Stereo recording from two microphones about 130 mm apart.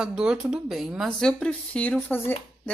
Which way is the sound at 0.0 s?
5° right (ahead or behind).